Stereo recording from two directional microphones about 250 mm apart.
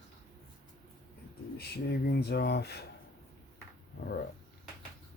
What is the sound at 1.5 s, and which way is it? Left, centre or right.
Speech, left.